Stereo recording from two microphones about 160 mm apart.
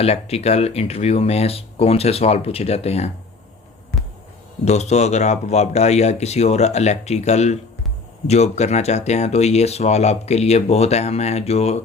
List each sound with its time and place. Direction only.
0.0 s speech: 40° left (ahead or behind)
4.6 s speech: 45° left (ahead or behind)